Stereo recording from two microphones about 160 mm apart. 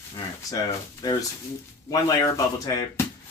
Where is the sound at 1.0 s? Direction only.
25° left (ahead or behind).